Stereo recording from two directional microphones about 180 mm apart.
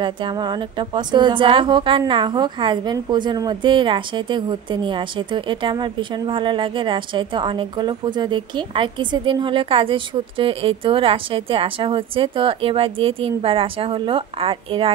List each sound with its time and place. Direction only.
0.0 s a woman's voice: 25° right (ahead or behind)